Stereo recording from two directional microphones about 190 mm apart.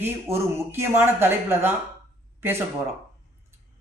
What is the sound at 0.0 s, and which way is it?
Speech, 15° right (ahead or behind).